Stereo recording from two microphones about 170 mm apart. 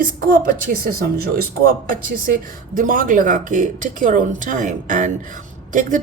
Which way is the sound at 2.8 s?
55° right (ahead or behind).